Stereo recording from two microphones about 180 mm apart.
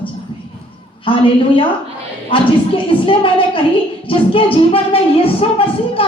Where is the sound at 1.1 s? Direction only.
30° left (ahead or behind).